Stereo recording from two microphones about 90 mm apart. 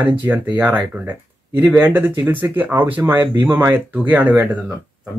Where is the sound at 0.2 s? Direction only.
20° right (ahead or behind).